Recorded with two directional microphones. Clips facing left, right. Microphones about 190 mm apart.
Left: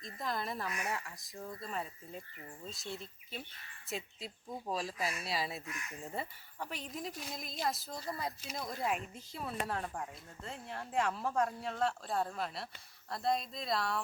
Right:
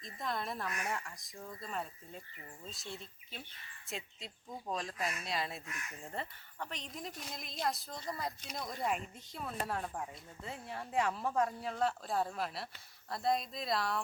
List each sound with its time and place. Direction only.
0.0 s speech: centre (ahead or behind)